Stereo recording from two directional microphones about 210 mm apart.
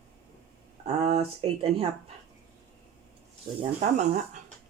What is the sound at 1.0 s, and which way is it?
Speech, 30° right (ahead or behind).